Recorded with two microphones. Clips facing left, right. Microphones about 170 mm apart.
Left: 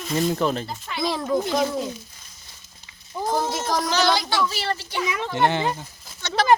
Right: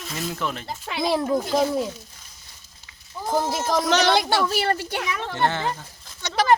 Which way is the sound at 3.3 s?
Centre (ahead or behind).